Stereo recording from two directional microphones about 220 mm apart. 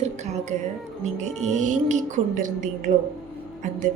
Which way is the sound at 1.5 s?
35° right (ahead or behind).